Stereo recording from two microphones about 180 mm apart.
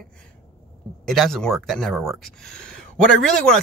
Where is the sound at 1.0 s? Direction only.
Centre (ahead or behind).